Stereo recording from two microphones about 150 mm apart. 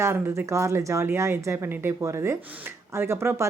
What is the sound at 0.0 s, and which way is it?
Speech, 15° right (ahead or behind).